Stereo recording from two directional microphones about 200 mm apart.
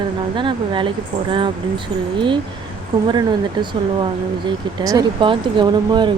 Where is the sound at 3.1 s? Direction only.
20° right (ahead or behind).